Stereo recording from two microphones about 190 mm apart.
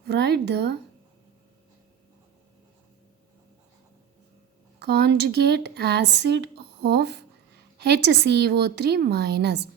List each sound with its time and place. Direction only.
0.0 s speech: 60° right (ahead or behind)
4.9 s speech: 60° right (ahead or behind)